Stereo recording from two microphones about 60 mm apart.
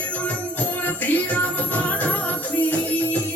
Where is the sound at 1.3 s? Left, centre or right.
Left.